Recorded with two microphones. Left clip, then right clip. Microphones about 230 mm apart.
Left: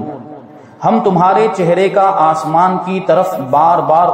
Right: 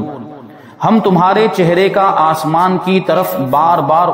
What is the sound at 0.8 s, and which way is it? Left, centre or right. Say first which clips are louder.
A man's voice: even; right.